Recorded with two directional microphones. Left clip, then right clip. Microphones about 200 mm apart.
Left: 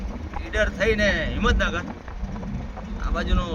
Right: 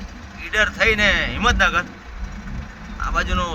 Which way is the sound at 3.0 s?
5° right (ahead or behind).